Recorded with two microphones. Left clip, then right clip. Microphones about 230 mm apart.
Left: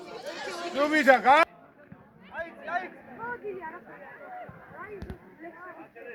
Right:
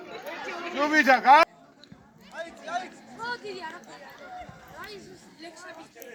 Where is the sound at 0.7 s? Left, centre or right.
Left.